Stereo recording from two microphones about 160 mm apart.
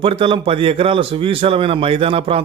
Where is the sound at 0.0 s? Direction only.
35° right (ahead or behind).